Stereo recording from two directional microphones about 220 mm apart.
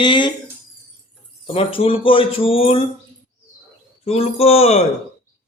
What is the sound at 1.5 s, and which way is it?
Speech, 25° left (ahead or behind).